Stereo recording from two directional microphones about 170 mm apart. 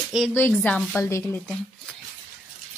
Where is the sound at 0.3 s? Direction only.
10° left (ahead or behind).